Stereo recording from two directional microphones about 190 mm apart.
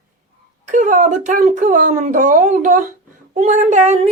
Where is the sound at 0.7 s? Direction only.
40° right (ahead or behind).